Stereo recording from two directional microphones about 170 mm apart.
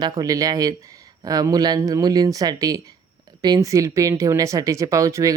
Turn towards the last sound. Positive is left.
turn(degrees=-20)  # may be behind; listen again after turning